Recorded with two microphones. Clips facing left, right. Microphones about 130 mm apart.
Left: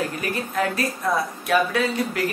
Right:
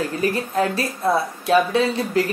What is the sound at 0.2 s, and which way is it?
A woman's voice, 30° right (ahead or behind).